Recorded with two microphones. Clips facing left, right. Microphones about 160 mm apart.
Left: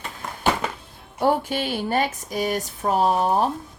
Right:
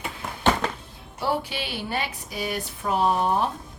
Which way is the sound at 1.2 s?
45° left (ahead or behind).